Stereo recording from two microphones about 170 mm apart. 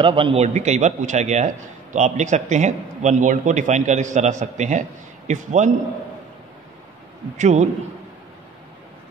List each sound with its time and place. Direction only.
0.0 s a man's voice: 30° right (ahead or behind)
7.3 s a man's voice: 45° right (ahead or behind)